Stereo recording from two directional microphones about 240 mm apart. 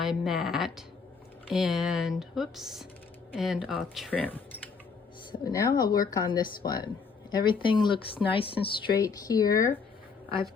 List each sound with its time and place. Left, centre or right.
0.0 s speech: centre